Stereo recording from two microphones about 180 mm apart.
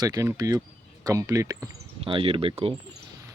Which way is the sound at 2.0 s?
30° right (ahead or behind).